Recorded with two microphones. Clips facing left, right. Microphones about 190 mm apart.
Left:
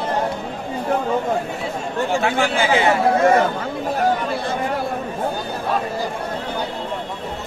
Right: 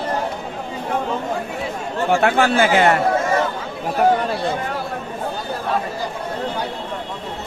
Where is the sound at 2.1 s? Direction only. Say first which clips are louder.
Right 5 dB; 60° right (ahead or behind).